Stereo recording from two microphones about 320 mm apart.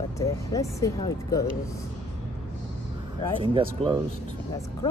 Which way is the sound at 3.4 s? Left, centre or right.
Centre.